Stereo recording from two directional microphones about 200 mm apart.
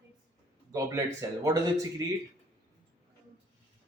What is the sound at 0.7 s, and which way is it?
A man's voice, 15° right (ahead or behind).